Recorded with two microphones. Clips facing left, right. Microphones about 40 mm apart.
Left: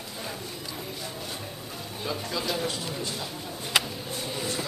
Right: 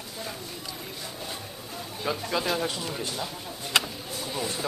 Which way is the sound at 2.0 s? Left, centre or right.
Right.